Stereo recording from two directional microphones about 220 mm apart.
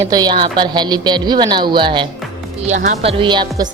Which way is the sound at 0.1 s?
20° right (ahead or behind).